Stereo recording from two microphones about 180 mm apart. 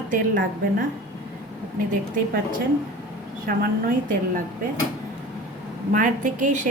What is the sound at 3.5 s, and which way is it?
Speech, 50° right (ahead or behind).